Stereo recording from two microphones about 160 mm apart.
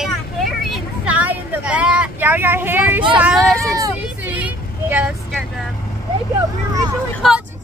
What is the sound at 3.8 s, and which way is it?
Vehicle, 20° right (ahead or behind).